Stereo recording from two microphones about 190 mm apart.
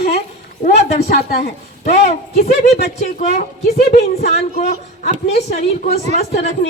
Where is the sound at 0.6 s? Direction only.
35° left (ahead or behind).